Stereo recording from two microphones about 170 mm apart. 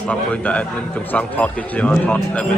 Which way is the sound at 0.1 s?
10° left (ahead or behind).